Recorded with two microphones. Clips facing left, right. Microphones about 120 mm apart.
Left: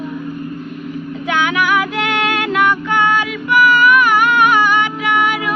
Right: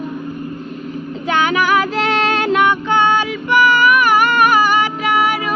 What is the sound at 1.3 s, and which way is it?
Child singing, 35° right (ahead or behind).